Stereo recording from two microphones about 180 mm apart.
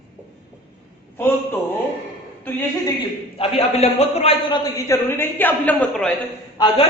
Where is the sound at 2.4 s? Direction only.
10° left (ahead or behind).